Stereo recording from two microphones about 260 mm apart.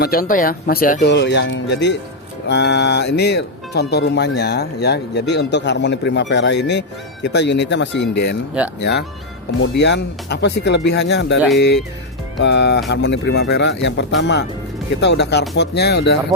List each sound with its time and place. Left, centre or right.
0.0 s a man's voice: left